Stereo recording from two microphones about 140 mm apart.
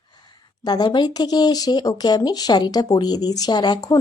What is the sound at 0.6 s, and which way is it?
Speech, 30° left (ahead or behind).